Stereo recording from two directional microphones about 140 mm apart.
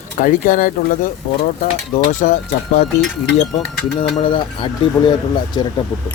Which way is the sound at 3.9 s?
35° left (ahead or behind).